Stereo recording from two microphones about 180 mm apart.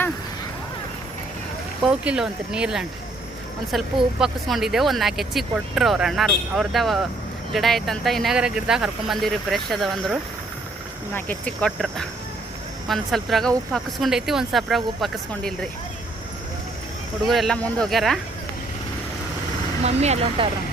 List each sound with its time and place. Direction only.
1.8 s speech: 5° right (ahead or behind)
4.2 s speech: centre (ahead or behind)
17.2 s speech: centre (ahead or behind)
19.8 s speech: 35° right (ahead or behind)